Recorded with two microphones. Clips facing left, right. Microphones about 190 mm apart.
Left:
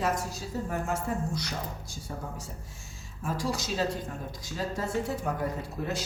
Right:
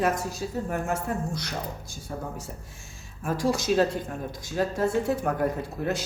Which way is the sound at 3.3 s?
50° right (ahead or behind).